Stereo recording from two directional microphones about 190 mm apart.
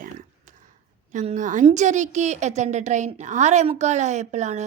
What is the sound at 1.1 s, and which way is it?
A woman's voice, 40° right (ahead or behind).